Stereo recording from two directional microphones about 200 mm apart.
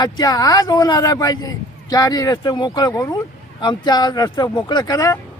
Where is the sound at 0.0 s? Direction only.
20° left (ahead or behind).